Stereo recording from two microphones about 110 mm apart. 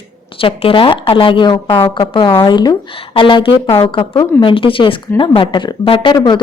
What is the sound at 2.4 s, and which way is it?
Speech, 45° left (ahead or behind).